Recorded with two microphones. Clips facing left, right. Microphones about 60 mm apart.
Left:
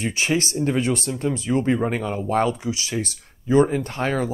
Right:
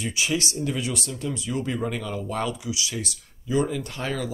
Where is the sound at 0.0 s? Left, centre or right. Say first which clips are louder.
Left 4 dB; left.